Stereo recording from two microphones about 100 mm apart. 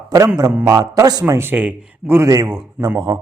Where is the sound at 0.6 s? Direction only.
35° right (ahead or behind).